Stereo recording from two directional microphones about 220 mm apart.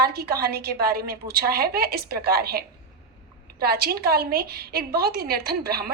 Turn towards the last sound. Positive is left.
turn(degrees=-45)  # may be behind; listen again after turning